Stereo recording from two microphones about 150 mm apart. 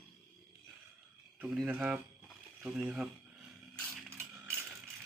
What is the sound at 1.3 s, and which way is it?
Speech, 10° right (ahead or behind).